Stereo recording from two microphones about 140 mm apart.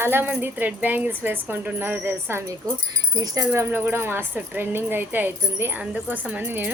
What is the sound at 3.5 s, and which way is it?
A woman's voice, 15° right (ahead or behind).